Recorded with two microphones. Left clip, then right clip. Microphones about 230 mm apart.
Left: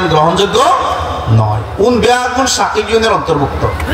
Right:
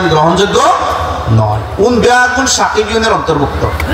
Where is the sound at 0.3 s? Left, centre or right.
Left.